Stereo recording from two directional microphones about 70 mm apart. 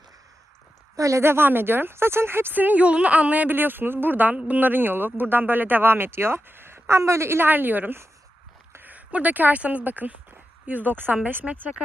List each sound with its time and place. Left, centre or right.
0.9 s a woman's voice: right
1.2 s speech: right